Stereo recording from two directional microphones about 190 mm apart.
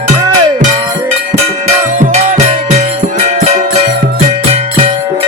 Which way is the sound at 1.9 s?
40° right (ahead or behind).